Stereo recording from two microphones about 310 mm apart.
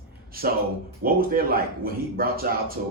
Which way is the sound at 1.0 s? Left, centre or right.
Right.